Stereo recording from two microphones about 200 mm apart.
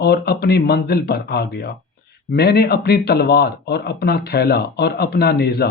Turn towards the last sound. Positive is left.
turn(degrees=55)  # may be behind; listen again after turning